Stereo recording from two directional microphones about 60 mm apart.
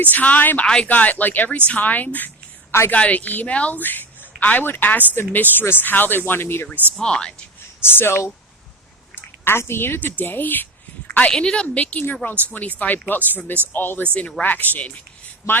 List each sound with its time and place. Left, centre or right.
0.0 s speech: left
0.6 s a woman's voice: centre
0.9 s speech: left
6.9 s a woman's voice: centre
7.8 s a woman's voice: left
11.3 s a woman's voice: centre
11.7 s speech: left
14.1 s speech: centre